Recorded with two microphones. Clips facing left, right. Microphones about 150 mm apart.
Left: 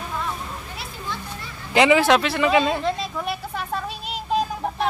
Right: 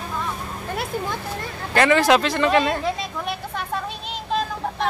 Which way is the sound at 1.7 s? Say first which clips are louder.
Left 2 dB; 15° left (ahead or behind).